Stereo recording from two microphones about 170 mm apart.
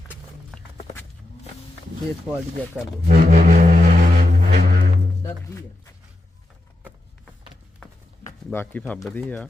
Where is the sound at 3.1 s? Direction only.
50° right (ahead or behind).